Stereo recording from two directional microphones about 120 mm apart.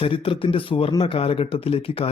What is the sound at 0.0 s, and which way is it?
Speech, 45° left (ahead or behind).